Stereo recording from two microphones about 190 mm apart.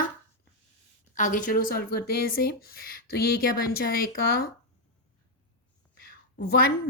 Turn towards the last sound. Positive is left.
turn(degrees=55)  # may be behind; listen again after turning